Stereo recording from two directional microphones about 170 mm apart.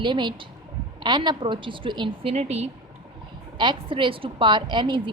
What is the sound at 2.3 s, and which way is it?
Speech, 40° right (ahead or behind).